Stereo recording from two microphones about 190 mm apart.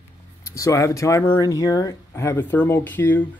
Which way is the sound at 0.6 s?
15° left (ahead or behind).